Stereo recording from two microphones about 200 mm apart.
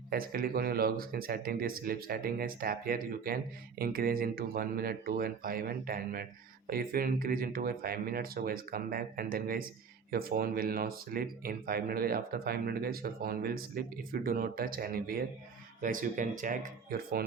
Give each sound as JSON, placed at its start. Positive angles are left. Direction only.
{"t": 0.1, "sound": "speech", "side_deg": -45}